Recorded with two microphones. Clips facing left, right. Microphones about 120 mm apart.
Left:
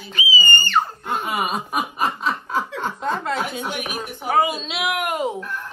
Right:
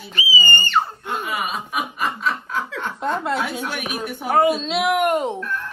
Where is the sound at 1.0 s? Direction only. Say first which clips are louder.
Left 2 dB; 40° left (ahead or behind).